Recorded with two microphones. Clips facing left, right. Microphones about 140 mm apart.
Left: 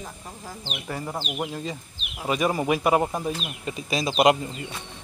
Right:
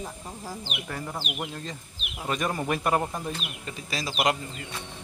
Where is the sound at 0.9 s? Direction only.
20° left (ahead or behind).